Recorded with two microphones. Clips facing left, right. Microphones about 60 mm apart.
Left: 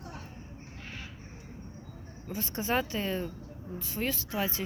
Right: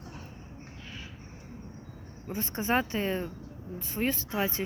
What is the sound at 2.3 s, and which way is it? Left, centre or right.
Speech, right.